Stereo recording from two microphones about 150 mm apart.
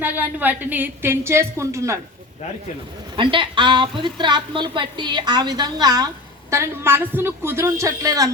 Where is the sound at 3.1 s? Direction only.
35° right (ahead or behind).